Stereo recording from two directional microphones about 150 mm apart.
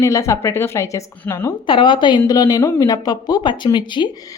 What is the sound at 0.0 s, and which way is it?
Speech, 20° left (ahead or behind).